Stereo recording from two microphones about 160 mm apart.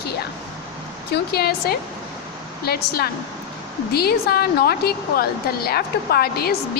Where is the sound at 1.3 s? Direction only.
75° left (ahead or behind).